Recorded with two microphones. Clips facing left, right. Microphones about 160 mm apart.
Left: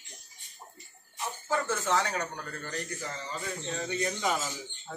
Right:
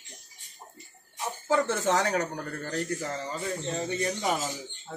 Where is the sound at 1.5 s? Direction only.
40° right (ahead or behind).